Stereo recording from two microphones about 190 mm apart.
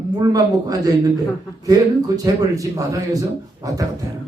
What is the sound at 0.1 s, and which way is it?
Speech, 20° right (ahead or behind).